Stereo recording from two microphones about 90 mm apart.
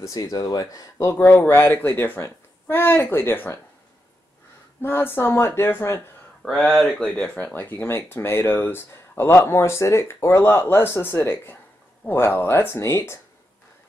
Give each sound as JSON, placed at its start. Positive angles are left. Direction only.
{"t": 0.0, "sound": "speech", "side_deg": 40}
{"t": 1.8, "sound": "speech", "side_deg": 20}
{"t": 4.8, "sound": "speech", "side_deg": 25}
{"t": 6.6, "sound": "speech", "side_deg": 0}